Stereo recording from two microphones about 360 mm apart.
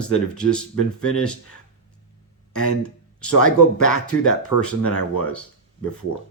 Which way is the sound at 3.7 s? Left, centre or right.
Left.